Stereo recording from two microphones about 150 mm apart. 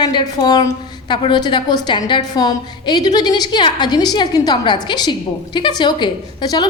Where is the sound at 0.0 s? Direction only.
30° left (ahead or behind).